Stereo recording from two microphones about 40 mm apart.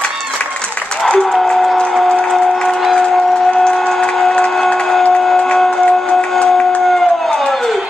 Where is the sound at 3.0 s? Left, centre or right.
Centre.